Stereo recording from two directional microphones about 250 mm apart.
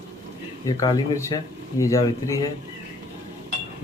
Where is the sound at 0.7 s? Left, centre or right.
Centre.